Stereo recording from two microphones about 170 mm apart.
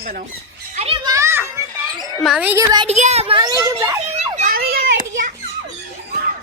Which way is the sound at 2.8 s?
40° right (ahead or behind).